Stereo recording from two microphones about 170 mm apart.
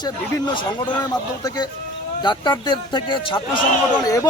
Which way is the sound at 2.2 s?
25° left (ahead or behind).